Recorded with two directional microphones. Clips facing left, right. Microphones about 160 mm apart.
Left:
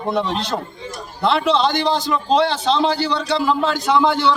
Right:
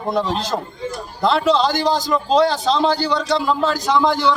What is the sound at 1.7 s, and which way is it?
Speech, 40° right (ahead or behind).